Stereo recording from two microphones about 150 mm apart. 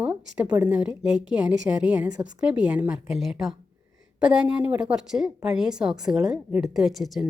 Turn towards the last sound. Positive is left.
turn(degrees=0)  # may be behind; listen again after turning